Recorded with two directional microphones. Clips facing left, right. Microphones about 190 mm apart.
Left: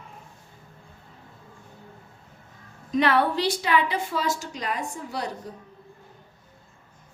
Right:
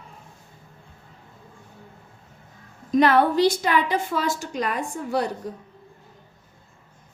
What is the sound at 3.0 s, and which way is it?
A woman's voice, 45° right (ahead or behind).